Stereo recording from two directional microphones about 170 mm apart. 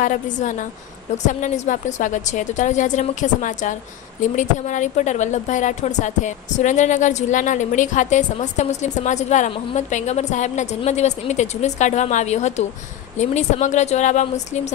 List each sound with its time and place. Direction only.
0.0 s a woman's voice: 50° left (ahead or behind)